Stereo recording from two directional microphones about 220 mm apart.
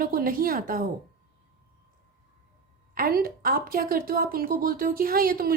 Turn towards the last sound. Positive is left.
turn(degrees=-40)  # may be behind; listen again after turning